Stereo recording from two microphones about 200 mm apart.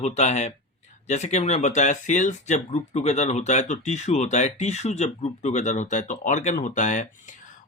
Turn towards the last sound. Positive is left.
turn(degrees=40)  # may be behind; listen again after turning